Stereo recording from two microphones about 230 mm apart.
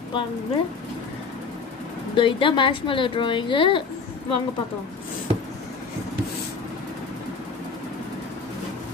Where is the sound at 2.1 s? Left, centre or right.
Left.